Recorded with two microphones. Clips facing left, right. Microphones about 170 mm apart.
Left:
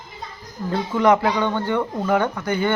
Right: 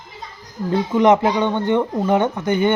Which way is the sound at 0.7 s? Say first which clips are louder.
Right 3 dB; 20° right (ahead or behind).